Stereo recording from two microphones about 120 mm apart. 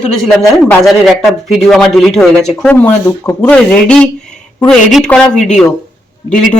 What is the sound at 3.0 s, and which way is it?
Speech, 30° left (ahead or behind).